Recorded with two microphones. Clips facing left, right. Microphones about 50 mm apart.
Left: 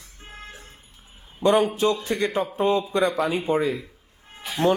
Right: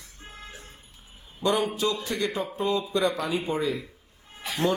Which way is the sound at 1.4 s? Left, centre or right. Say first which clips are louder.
Left 6 dB; left.